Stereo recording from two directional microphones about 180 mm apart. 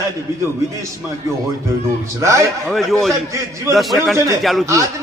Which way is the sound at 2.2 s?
15° right (ahead or behind).